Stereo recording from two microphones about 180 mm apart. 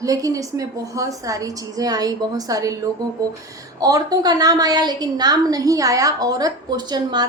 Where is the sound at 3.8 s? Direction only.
20° right (ahead or behind).